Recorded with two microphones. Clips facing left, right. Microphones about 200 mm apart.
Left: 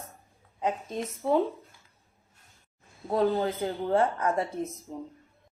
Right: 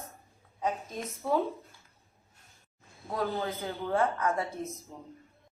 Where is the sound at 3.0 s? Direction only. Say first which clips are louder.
Left 7 dB; 30° left (ahead or behind).